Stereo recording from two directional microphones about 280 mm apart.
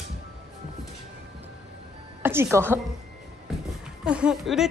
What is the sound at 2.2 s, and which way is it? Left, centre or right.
Speech, centre.